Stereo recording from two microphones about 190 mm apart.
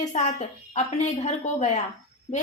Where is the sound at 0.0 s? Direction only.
35° left (ahead or behind).